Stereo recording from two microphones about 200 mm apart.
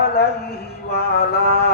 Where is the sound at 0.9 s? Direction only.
50° left (ahead or behind).